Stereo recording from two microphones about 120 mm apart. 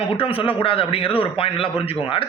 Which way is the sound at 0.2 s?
50° left (ahead or behind).